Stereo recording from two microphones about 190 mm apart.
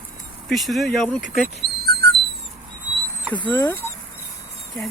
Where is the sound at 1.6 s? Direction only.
25° right (ahead or behind).